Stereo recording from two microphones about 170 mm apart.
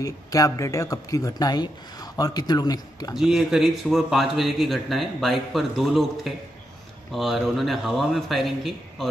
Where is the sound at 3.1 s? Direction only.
Centre (ahead or behind).